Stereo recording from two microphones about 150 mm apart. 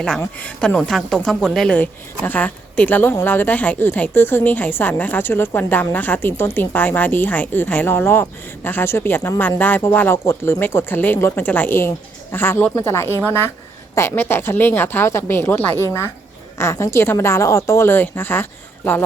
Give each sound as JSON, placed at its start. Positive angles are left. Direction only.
{"t": 0.2, "sound": "speech", "side_deg": 10}